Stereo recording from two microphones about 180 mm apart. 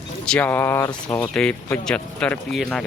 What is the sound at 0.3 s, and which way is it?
A man's voice, 10° left (ahead or behind).